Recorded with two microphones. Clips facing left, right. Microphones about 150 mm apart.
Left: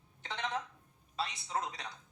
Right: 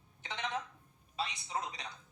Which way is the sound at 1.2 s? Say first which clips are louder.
Left 1 dB; 45° left (ahead or behind).